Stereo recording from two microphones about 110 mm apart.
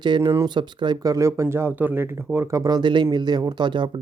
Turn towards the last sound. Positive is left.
turn(degrees=-45)  # may be behind; listen again after turning